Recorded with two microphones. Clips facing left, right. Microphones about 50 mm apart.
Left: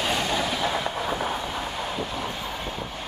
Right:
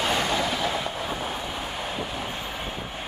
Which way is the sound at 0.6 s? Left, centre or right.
Centre.